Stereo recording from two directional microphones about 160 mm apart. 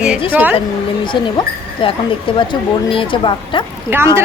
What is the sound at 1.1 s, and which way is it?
Speech, 30° left (ahead or behind).